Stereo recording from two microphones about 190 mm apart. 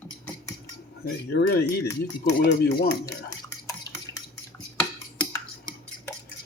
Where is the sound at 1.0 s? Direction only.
55° left (ahead or behind).